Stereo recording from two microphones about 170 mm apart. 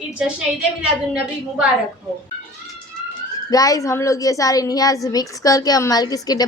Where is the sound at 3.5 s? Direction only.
20° left (ahead or behind).